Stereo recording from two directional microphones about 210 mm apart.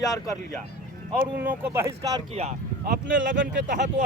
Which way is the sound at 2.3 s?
30° right (ahead or behind).